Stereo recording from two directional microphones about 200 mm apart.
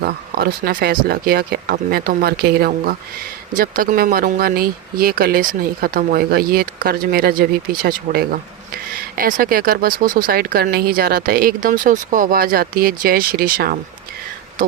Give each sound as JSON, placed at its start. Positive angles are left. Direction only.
{"t": 0.0, "sound": "speech", "side_deg": -50}